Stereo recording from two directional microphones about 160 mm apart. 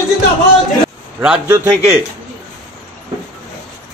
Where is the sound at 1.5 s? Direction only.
15° right (ahead or behind).